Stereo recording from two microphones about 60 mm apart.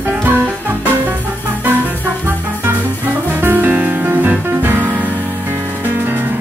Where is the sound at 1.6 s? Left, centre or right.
Right.